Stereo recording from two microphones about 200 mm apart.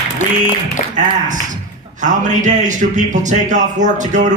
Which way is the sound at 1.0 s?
40° right (ahead or behind).